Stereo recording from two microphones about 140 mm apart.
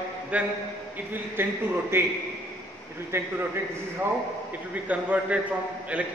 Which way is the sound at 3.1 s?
20° right (ahead or behind).